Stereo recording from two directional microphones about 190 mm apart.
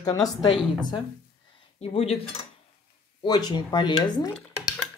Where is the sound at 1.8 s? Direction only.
30° left (ahead or behind).